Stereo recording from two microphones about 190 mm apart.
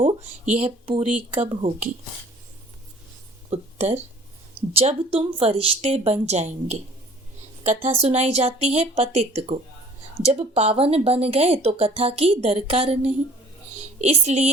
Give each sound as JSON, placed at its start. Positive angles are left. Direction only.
{"t": 0.0, "sound": "speech", "side_deg": -35}
{"t": 3.5, "sound": "speech", "side_deg": -35}